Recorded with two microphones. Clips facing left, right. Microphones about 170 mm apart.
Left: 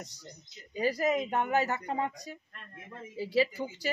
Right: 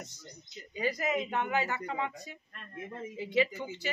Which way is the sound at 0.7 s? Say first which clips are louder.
Left 3 dB; 35° left (ahead or behind).